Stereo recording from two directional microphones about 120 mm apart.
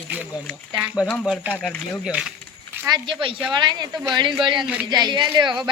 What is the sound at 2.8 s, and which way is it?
Speech, 40° right (ahead or behind).